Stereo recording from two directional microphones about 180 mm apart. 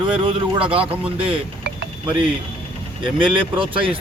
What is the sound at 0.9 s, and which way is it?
Speech, 30° right (ahead or behind).